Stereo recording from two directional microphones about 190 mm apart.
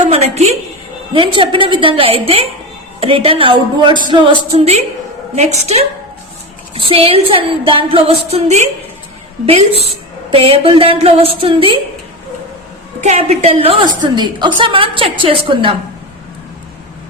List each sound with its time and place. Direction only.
0.1 s a woman's voice: 35° right (ahead or behind)
10.3 s a woman's voice: 30° right (ahead or behind)
13.0 s a woman's voice: 35° right (ahead or behind)